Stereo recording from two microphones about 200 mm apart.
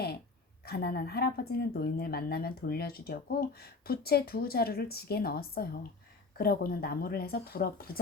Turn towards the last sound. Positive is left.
turn(degrees=45)  # may be behind; listen again after turning